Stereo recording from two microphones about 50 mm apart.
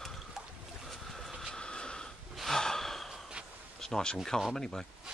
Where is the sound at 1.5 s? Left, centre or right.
Centre.